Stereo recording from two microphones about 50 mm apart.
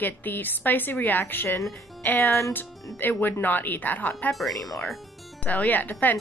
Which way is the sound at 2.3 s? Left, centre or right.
Left.